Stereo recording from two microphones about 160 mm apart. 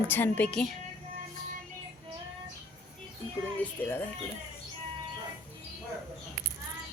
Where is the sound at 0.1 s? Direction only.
10° left (ahead or behind).